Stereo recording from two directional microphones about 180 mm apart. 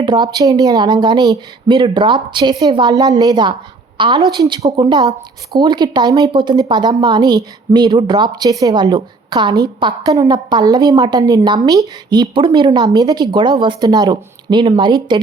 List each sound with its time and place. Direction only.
0.0 s a woman's voice: 25° right (ahead or behind)